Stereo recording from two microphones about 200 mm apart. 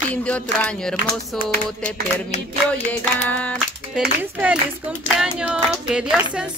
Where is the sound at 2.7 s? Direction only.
5° left (ahead or behind).